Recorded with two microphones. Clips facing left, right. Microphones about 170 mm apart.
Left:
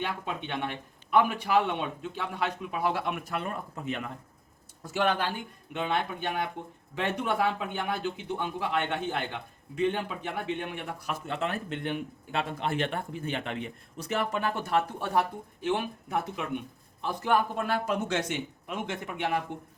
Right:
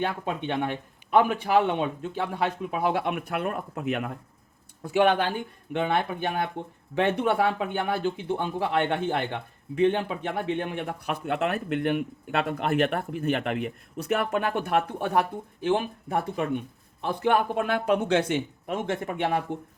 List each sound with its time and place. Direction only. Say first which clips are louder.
0.0 s a man's voice: right 5 dB; 50° right (ahead or behind)
17.0 s a man's voice: right 3 dB; 60° right (ahead or behind)